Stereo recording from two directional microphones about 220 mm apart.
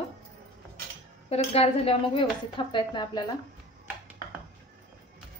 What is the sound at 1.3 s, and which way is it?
A woman's voice, 25° left (ahead or behind).